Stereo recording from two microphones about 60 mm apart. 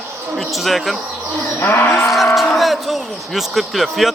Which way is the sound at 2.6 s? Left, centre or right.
Centre.